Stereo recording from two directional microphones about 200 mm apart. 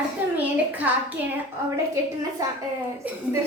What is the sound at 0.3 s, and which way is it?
A woman's voice, 10° right (ahead or behind).